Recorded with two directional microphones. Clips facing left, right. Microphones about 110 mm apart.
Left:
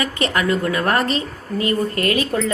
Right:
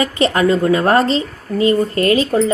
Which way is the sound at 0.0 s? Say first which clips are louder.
Right 6 dB; 30° right (ahead or behind).